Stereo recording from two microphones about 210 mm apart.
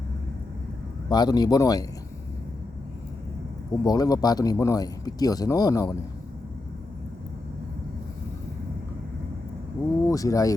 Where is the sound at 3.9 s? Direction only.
15° left (ahead or behind).